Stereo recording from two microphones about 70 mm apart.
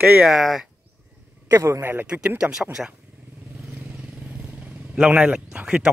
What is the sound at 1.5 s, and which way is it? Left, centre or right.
Speech, right.